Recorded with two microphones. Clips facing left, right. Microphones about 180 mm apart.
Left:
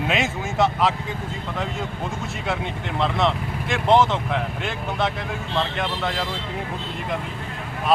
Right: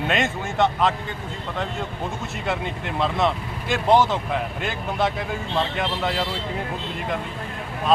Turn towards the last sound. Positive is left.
turn(degrees=-5)  # may be behind; listen again after turning